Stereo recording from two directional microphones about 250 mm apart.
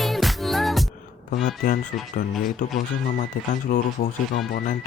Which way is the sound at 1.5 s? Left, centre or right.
Left.